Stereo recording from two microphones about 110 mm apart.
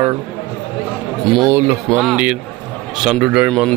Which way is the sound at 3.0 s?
10° right (ahead or behind).